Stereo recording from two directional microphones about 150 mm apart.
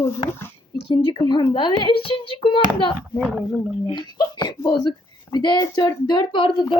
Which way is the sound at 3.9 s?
30° left (ahead or behind).